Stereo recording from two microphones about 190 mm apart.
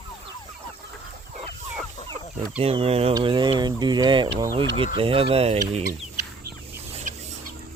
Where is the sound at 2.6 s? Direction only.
30° right (ahead or behind).